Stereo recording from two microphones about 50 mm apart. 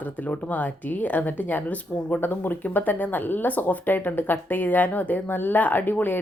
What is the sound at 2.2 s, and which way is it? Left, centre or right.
A woman's voice, left.